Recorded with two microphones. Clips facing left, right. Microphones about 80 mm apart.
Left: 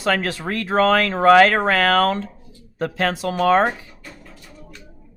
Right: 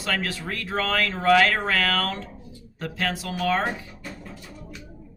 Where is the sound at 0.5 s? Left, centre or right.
Left.